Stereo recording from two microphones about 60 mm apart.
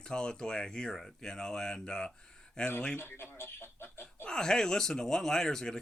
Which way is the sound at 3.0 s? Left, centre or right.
Left.